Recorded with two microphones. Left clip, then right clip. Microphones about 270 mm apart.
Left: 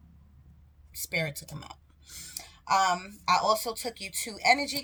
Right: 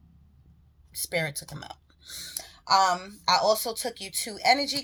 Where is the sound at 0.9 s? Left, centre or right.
Centre.